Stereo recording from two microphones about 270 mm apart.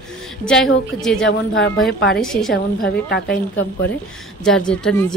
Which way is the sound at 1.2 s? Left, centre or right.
Left.